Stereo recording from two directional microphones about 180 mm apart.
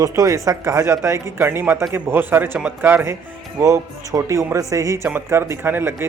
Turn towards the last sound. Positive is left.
turn(degrees=-10)  # may be behind; listen again after turning